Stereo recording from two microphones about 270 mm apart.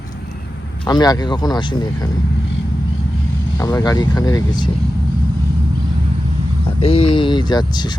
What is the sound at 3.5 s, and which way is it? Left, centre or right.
Speech, centre.